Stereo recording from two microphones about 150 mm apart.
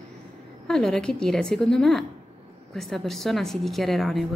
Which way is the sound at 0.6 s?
5° left (ahead or behind).